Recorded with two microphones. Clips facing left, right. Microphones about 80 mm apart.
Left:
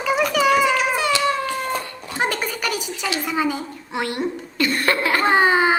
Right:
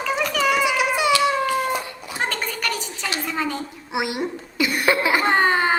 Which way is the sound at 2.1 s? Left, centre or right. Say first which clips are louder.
Left 3 dB; centre.